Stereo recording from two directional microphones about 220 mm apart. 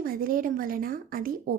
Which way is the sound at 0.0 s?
40° right (ahead or behind).